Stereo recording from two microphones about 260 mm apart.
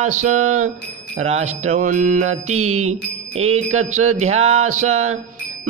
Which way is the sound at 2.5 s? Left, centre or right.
Right.